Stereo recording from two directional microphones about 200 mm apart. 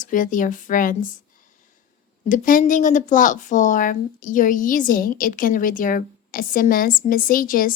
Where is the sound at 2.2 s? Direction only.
40° left (ahead or behind).